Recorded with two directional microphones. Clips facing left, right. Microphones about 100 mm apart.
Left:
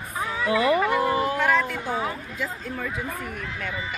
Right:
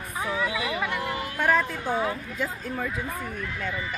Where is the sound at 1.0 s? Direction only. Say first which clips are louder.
Left 8 dB; 35° left (ahead or behind).